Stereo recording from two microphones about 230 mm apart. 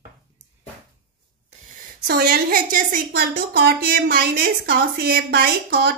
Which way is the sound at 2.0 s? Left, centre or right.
Right.